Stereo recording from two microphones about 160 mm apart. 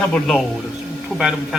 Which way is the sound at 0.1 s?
Centre (ahead or behind).